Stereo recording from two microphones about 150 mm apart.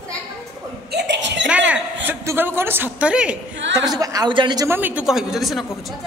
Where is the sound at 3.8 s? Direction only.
25° right (ahead or behind).